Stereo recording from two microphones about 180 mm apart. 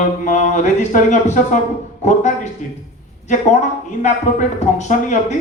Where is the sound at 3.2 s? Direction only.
40° left (ahead or behind).